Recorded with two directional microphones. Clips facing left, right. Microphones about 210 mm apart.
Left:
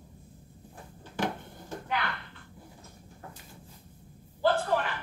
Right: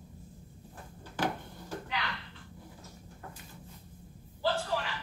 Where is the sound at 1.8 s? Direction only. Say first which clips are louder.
Left 8 dB; 55° left (ahead or behind).